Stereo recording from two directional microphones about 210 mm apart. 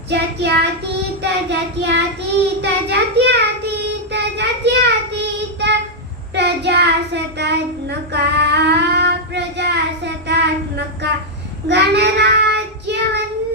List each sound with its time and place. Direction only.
0.1 s child singing: 55° right (ahead or behind)